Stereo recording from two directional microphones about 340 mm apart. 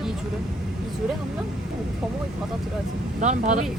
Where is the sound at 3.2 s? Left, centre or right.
Right.